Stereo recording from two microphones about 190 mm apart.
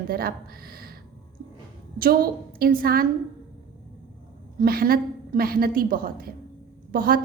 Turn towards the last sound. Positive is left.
turn(degrees=-50)  # may be behind; listen again after turning